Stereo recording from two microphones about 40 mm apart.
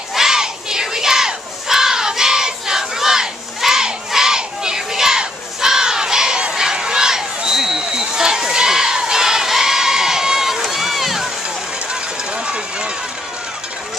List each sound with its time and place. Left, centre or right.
0.1 s crowd: centre
12.4 s run: right